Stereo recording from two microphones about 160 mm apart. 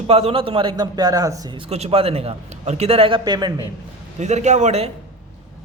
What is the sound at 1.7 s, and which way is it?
A man's voice, 40° right (ahead or behind).